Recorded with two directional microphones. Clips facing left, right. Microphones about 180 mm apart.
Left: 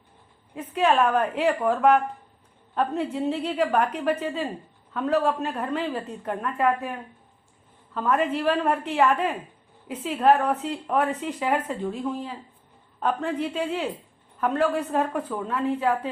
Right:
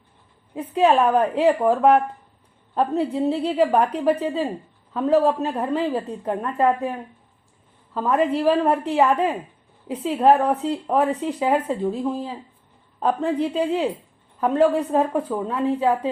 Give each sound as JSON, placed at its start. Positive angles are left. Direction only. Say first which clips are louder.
{"t": 0.5, "sound": "a woman's voice", "louder": "right 4 dB", "side_deg": -35}
{"t": 8.1, "sound": "a woman's voice", "louder": "right 4 dB", "side_deg": -35}
{"t": 13.0, "sound": "a woman's voice", "louder": "right 4 dB", "side_deg": -35}